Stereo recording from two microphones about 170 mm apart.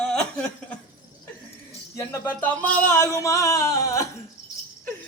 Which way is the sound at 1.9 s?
15° left (ahead or behind).